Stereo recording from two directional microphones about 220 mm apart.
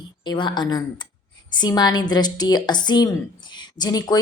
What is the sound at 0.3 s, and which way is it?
A woman's voice, 20° left (ahead or behind).